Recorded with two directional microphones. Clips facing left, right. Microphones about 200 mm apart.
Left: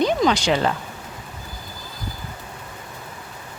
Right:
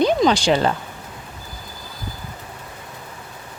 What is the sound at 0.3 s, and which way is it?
Speech, 30° right (ahead or behind).